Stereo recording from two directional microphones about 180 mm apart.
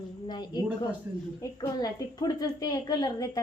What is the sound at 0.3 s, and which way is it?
A woman's voice, 25° left (ahead or behind).